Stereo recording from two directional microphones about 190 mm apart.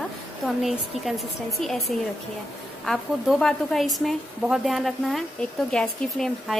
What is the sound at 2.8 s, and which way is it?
A woman's voice, centre (ahead or behind).